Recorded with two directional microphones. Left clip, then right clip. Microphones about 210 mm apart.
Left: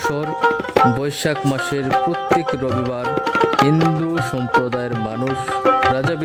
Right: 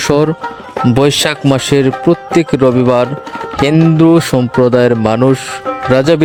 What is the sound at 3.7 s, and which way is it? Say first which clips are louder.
Speech: right 9 dB; 40° right (ahead or behind).